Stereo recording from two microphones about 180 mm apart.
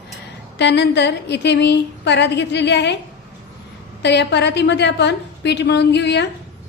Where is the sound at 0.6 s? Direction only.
75° left (ahead or behind).